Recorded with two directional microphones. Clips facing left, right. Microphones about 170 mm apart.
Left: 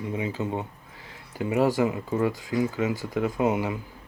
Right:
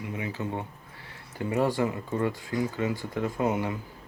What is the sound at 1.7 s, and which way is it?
Speech, 15° left (ahead or behind).